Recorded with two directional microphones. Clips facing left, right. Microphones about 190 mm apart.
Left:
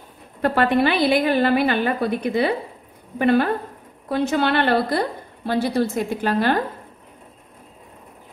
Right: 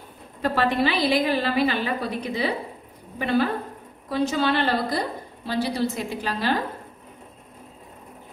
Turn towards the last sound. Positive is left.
turn(degrees=55)  # may be behind; listen again after turning